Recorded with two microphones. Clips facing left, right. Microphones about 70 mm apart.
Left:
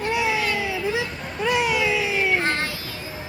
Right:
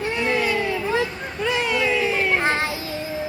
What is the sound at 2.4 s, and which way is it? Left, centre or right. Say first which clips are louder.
Child singing: right 3 dB; right.